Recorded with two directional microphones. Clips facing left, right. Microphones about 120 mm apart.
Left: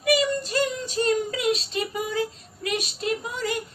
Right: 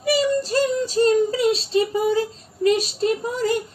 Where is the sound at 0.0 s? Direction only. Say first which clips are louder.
Right 3 dB; 35° right (ahead or behind).